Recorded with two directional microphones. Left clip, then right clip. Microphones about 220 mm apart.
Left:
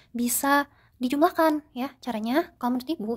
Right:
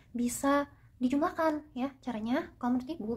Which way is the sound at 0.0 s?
40° left (ahead or behind).